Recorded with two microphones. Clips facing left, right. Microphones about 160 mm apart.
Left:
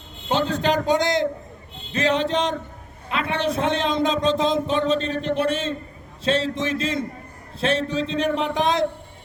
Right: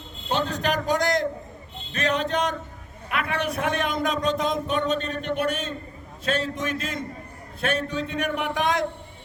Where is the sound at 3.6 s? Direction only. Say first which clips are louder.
Left 4 dB; 25° left (ahead or behind).